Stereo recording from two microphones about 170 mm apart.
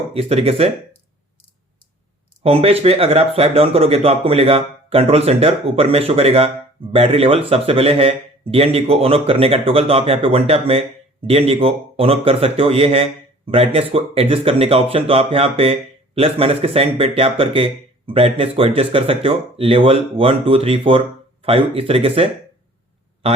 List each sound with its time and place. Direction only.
0.1 s speech: 35° right (ahead or behind)
2.4 s speech: 35° right (ahead or behind)